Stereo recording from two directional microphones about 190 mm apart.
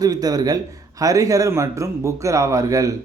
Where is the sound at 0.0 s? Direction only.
20° right (ahead or behind).